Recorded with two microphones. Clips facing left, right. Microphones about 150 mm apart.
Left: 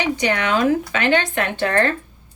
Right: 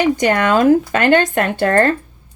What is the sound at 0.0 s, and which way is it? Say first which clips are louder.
Speech: right 6 dB; 50° right (ahead or behind).